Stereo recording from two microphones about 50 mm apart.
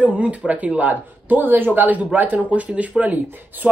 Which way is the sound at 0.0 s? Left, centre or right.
Right.